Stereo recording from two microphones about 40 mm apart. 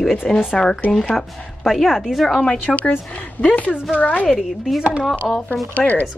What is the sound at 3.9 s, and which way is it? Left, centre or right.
Speech, left.